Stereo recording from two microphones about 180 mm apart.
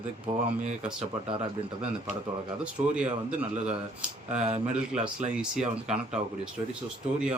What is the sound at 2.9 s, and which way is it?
Speech, 5° right (ahead or behind).